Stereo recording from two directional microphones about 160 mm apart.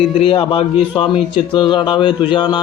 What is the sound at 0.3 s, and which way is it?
A man's voice, 35° left (ahead or behind).